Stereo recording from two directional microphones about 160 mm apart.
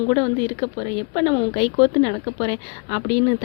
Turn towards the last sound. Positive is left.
turn(degrees=35)  # may be behind; listen again after turning